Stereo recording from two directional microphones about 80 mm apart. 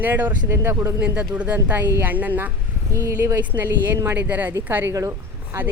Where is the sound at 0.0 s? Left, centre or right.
Right.